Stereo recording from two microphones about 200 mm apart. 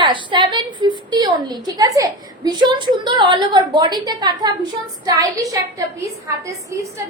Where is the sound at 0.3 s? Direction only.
20° right (ahead or behind).